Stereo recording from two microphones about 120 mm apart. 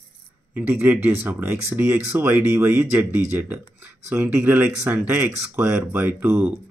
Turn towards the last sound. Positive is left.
turn(degrees=-15)  # may be behind; listen again after turning